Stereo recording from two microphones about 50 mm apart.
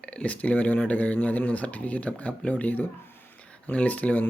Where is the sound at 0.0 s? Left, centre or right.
Left.